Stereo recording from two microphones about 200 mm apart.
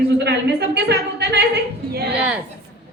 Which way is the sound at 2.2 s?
5° right (ahead or behind).